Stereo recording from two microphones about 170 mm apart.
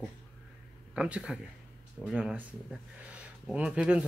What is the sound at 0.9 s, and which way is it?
Speech, 5° right (ahead or behind).